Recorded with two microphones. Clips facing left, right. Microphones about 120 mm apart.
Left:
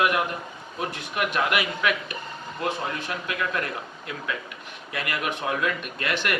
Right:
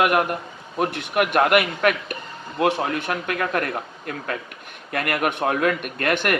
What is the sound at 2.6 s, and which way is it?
A man's voice, 65° right (ahead or behind).